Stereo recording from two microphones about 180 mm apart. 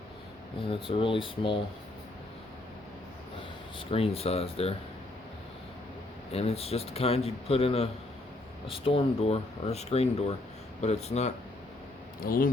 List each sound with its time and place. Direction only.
0.7 s speech: 30° left (ahead or behind)
3.8 s speech: 30° left (ahead or behind)
6.3 s speech: 35° left (ahead or behind)
12.2 s speech: 50° left (ahead or behind)